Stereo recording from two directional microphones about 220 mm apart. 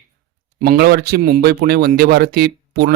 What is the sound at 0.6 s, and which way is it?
A man's voice, 45° right (ahead or behind).